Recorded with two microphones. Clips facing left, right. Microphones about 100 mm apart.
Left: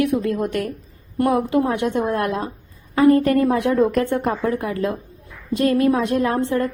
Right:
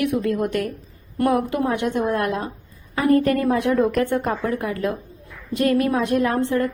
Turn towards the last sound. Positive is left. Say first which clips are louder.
# even
turn(degrees=25)  # may be behind; listen again after turning